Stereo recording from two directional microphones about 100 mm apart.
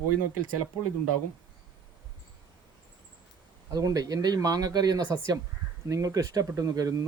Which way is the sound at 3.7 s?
35° right (ahead or behind).